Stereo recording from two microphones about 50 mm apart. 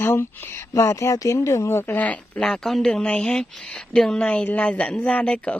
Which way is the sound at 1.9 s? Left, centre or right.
Left.